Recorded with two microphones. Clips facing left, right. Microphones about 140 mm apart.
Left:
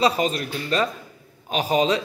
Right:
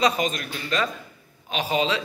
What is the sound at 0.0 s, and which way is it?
A man's voice, 30° left (ahead or behind).